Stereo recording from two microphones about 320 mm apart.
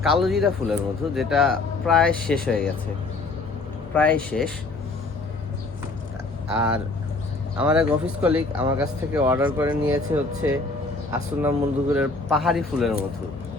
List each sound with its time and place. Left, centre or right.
0.0 s speech: centre
3.9 s speech: centre
6.5 s speech: centre
11.4 s speech: centre